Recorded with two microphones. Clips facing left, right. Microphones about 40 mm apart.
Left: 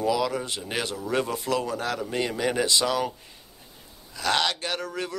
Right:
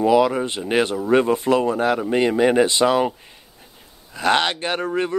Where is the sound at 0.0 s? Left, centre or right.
Right.